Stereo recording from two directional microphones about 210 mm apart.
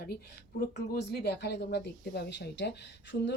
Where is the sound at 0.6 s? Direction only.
50° left (ahead or behind).